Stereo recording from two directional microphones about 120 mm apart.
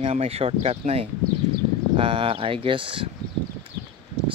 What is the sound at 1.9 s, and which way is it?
Speech, 45° right (ahead or behind).